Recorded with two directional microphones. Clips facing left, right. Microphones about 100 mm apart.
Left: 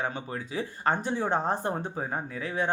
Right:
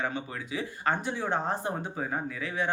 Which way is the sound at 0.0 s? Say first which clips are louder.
Left 1 dB; 35° left (ahead or behind).